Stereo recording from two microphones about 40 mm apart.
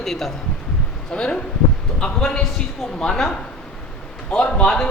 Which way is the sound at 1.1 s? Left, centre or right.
Left.